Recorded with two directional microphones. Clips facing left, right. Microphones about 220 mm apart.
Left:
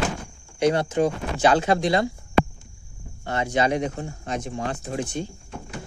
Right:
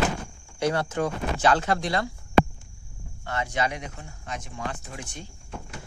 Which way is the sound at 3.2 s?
25° left (ahead or behind).